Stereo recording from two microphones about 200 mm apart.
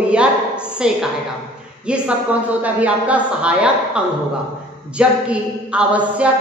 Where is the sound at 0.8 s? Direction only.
5° right (ahead or behind).